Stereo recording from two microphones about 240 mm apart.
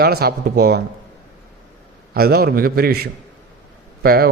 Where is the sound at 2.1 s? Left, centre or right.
Right.